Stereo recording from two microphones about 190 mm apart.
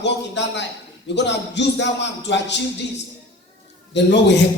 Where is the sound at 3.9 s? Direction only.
65° left (ahead or behind).